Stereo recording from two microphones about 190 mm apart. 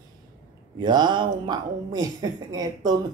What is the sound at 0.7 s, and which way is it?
Speech, 25° right (ahead or behind).